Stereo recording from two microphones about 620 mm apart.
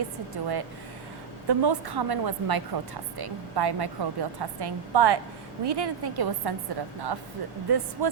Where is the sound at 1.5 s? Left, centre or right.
Right.